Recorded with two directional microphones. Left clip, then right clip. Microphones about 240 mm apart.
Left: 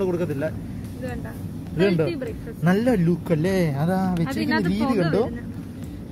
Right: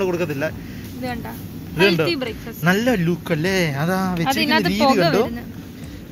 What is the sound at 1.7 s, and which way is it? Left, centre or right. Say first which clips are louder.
Speech: right 5 dB; centre.